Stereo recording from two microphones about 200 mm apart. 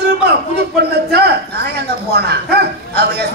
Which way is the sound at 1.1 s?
55° right (ahead or behind).